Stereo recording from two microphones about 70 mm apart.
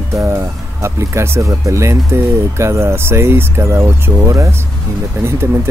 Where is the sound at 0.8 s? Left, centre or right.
Right.